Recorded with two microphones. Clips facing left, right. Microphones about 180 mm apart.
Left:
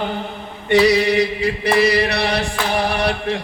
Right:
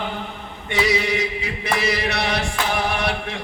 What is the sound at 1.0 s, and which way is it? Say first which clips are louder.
Chant: left 7 dB; 65° left (ahead or behind).